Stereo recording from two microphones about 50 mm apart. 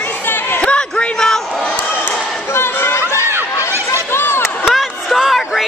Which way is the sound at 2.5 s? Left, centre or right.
Left.